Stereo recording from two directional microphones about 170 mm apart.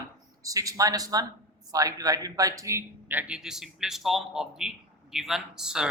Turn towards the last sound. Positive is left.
turn(degrees=-5)  # may be behind; listen again after turning